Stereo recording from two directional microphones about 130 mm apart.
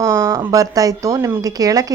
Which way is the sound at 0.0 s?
25° right (ahead or behind).